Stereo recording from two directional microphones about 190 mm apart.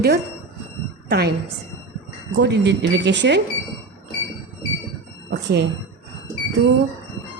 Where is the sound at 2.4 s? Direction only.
65° right (ahead or behind).